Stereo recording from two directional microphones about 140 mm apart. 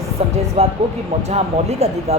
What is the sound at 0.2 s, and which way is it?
Music, 45° right (ahead or behind).